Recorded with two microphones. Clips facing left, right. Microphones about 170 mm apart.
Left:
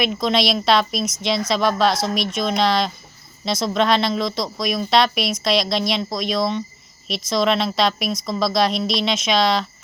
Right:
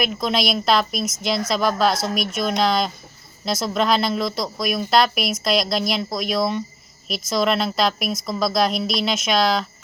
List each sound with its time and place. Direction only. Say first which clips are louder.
0.0 s a woman's voice: left 2 dB; centre (ahead or behind)